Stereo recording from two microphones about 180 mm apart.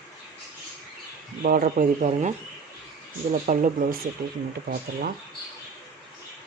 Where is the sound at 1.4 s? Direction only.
50° right (ahead or behind).